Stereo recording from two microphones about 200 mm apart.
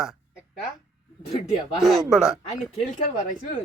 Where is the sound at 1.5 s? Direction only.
Centre (ahead or behind).